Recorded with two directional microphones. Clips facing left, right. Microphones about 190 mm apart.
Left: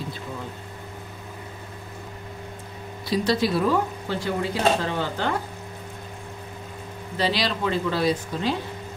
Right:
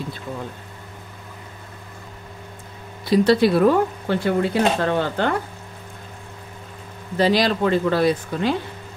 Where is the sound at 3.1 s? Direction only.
55° right (ahead or behind).